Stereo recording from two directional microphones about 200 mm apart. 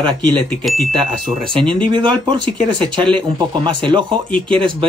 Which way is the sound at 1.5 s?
25° right (ahead or behind).